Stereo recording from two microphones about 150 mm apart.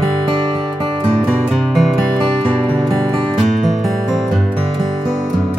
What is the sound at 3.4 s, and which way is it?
Music, centre (ahead or behind).